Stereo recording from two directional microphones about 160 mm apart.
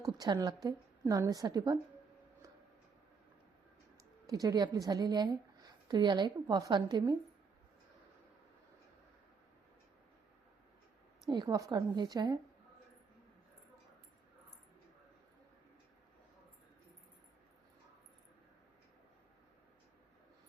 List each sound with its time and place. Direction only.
0.0 s a woman's voice: 25° right (ahead or behind)
4.3 s a woman's voice: 25° right (ahead or behind)
11.3 s a woman's voice: 25° right (ahead or behind)